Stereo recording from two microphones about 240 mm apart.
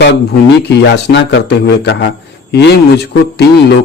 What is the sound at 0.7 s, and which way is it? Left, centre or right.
A man's voice, left.